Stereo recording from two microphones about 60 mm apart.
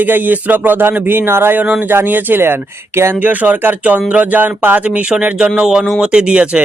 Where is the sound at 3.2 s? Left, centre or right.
Right.